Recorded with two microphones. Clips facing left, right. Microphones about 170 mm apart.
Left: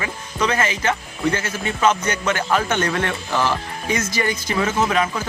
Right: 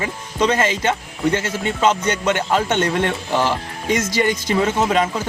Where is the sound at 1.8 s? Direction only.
20° right (ahead or behind).